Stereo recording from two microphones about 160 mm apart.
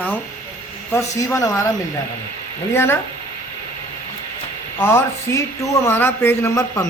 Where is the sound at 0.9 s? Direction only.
15° left (ahead or behind).